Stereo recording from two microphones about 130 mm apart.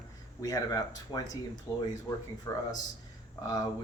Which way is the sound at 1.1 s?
35° left (ahead or behind).